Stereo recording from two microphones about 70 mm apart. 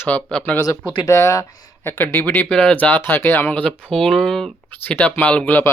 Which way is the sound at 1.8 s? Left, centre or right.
Left.